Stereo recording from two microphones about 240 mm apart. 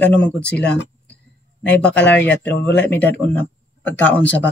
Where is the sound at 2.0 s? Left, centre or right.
Left.